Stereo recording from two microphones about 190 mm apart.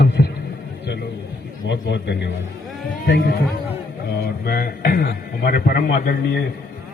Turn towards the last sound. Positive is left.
turn(degrees=55)  # may be behind; listen again after turning